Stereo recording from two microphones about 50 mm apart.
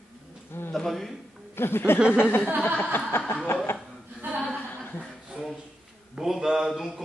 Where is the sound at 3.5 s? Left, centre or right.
Left.